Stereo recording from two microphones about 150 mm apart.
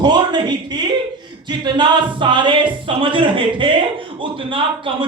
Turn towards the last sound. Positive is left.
turn(degrees=-35)  # may be behind; listen again after turning